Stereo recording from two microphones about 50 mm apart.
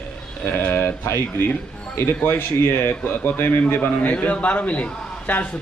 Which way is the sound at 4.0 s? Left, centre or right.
Left.